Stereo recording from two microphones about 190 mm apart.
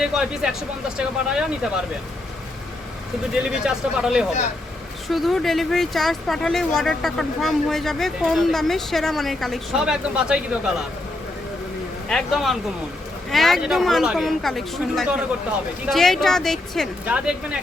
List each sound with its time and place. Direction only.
0.0 s speech: 5° right (ahead or behind)
3.5 s speech: 5° right (ahead or behind)
12.0 s speech: centre (ahead or behind)